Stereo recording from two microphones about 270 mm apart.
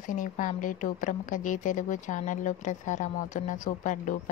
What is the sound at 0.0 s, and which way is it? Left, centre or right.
A woman's voice, left.